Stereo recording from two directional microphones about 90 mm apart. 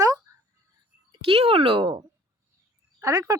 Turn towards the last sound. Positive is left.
turn(degrees=-40)  # may be behind; listen again after turning